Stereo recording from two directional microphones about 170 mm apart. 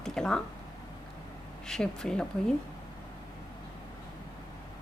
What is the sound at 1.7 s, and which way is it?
Speech, 5° left (ahead or behind).